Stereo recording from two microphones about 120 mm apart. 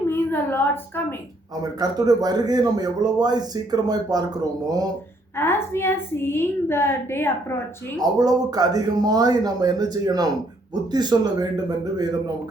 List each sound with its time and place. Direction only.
0.1 s a woman's voice: 15° left (ahead or behind)
1.6 s a man's voice: 35° right (ahead or behind)
5.4 s a woman's voice: 20° left (ahead or behind)
7.9 s a man's voice: 30° right (ahead or behind)